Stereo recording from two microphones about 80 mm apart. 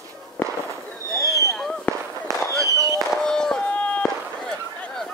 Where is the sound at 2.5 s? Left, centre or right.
Right.